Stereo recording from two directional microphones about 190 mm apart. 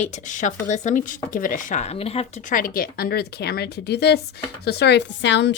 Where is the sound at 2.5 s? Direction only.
50° left (ahead or behind); by 5.5 s 70° left (ahead or behind).